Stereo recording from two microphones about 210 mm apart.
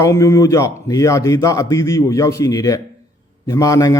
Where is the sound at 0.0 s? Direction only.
15° left (ahead or behind).